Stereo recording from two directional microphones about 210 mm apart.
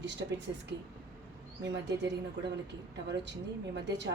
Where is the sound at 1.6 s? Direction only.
55° right (ahead or behind).